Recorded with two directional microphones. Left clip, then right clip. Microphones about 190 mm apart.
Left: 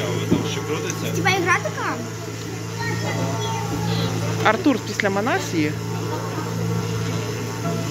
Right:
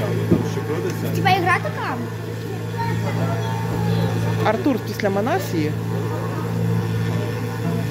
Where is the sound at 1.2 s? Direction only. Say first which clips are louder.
Right 2 dB; 60° right (ahead or behind).